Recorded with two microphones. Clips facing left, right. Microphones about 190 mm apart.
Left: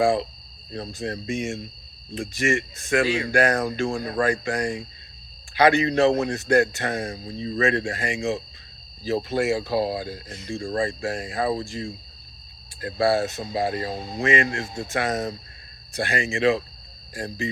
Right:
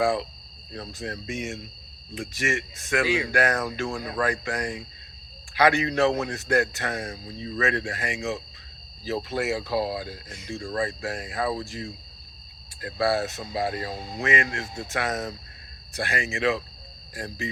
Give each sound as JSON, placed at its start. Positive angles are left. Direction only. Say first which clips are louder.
{"t": 0.0, "sound": "speech", "louder": "left 3 dB", "side_deg": 30}
{"t": 12.8, "sound": "speech", "louder": "left 3 dB", "side_deg": 30}